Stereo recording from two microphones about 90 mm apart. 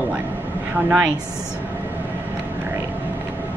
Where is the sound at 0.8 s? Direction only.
10° right (ahead or behind).